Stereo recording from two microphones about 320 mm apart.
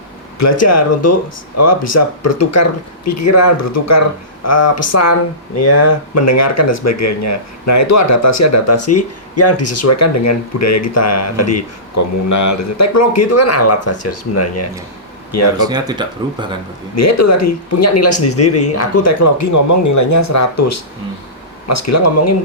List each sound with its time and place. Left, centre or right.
0.3 s speech: left
15.5 s speech: centre
16.9 s speech: left